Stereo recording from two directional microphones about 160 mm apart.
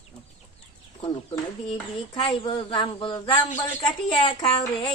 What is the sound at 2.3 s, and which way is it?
A man's voice, 30° left (ahead or behind).